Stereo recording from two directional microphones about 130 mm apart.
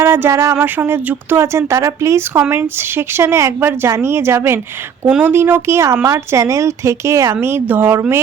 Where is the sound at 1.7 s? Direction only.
20° right (ahead or behind).